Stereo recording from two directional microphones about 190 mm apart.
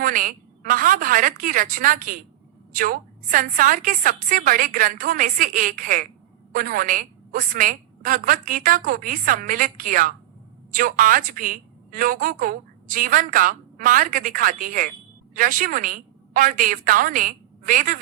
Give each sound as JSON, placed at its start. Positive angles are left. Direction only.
{"t": 0.0, "sound": "a woman's voice", "side_deg": -45}